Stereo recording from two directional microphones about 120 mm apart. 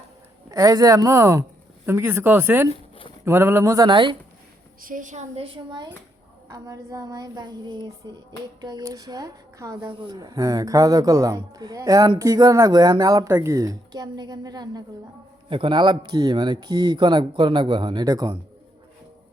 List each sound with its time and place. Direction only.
0.5 s speech: 30° right (ahead or behind)
3.8 s speech: 40° right (ahead or behind)
4.9 s a woman's voice: 90° right
5.4 s a woman's voice: 50° right (ahead or behind)
6.5 s speech: 30° right (ahead or behind)
9.7 s speech: 45° right (ahead or behind)
15.4 s speech: 45° right (ahead or behind)